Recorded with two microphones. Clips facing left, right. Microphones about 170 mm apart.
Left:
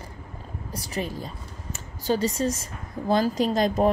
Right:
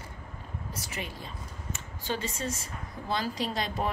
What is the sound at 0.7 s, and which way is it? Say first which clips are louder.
A woman's voice: left 10 dB; 35° left (ahead or behind).